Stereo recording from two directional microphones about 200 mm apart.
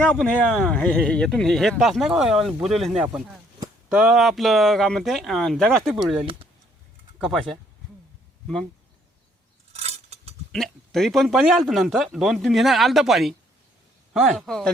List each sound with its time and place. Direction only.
0.0 s speech: 5° left (ahead or behind)
7.3 s speech: centre (ahead or behind)
9.7 s a sound: 30° right (ahead or behind)
10.5 s speech: centre (ahead or behind)